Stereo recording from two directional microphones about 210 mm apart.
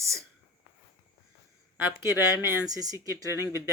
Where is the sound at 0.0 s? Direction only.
15° right (ahead or behind).